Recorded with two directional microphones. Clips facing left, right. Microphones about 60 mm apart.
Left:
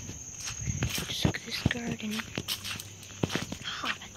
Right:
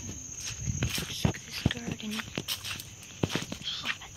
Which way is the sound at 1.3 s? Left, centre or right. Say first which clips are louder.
Left 5 dB; left.